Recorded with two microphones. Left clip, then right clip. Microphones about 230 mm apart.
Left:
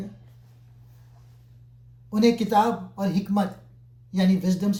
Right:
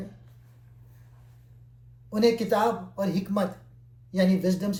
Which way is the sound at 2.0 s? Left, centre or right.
Left.